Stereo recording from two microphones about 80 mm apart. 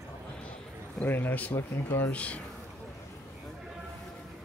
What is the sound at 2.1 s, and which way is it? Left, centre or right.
Speech, centre.